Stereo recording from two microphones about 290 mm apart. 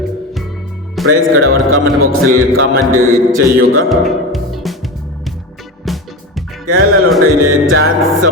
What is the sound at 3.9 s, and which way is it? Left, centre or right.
Music, centre.